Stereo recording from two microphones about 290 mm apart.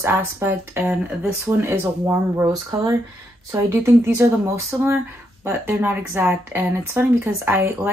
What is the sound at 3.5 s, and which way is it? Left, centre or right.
Speech, centre.